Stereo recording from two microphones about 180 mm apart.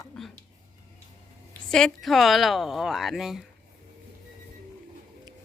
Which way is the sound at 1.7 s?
Centre (ahead or behind).